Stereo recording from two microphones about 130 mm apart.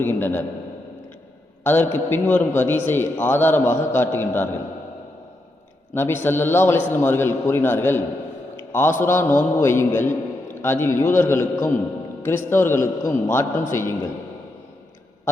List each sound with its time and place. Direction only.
0.0 s a man's voice: 15° left (ahead or behind)
1.6 s a man's voice: 15° left (ahead or behind)
5.9 s a man's voice: 15° left (ahead or behind)